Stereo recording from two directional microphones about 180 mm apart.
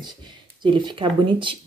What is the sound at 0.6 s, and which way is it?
Speech, 25° right (ahead or behind).